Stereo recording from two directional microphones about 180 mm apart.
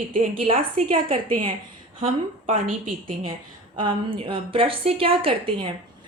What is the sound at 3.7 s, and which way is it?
A woman's voice, 30° right (ahead or behind).